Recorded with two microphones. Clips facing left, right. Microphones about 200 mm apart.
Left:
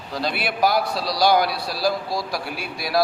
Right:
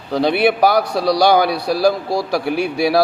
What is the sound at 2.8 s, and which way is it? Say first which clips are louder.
Speech: right 6 dB; 70° right (ahead or behind).